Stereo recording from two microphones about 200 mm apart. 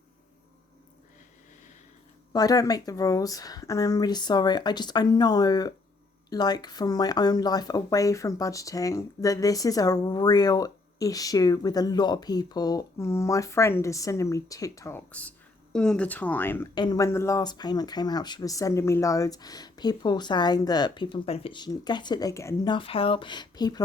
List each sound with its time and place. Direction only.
2.3 s speech: 20° left (ahead or behind)
16.7 s speech: 20° left (ahead or behind)